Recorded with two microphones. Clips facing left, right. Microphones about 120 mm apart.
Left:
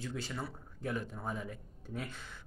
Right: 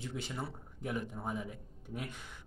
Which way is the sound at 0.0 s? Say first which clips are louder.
Even; 20° right (ahead or behind).